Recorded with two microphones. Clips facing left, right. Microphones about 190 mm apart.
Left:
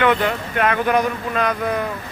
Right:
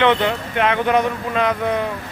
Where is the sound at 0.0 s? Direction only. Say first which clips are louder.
Right 1 dB; 25° right (ahead or behind).